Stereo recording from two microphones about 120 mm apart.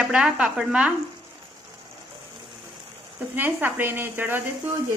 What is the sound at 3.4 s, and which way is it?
A woman's voice, 15° right (ahead or behind).